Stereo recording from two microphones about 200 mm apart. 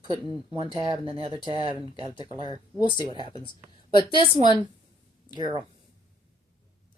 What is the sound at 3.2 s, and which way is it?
Speech, 25° left (ahead or behind).